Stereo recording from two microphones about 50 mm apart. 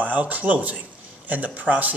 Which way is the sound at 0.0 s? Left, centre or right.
Right.